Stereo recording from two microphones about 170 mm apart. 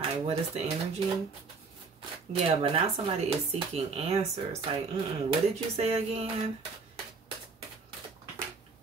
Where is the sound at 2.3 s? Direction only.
35° right (ahead or behind).